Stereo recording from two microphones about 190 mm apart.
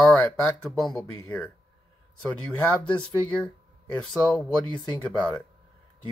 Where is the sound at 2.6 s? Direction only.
5° left (ahead or behind).